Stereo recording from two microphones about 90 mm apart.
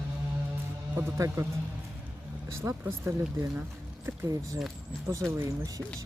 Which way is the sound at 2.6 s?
30° right (ahead or behind).